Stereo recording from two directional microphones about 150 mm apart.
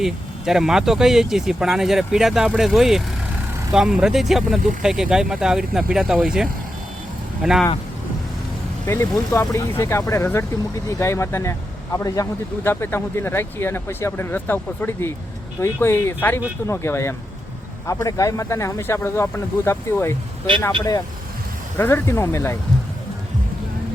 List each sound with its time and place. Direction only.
0.0 s speech: 5° right (ahead or behind)
8.9 s speech: 15° left (ahead or behind)
21.8 s speech: 15° left (ahead or behind)